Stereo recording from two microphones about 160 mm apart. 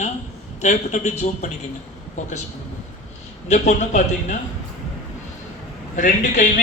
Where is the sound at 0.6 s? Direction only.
45° left (ahead or behind).